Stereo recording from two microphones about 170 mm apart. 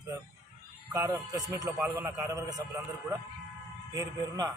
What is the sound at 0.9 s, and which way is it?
A man's voice, 20° right (ahead or behind).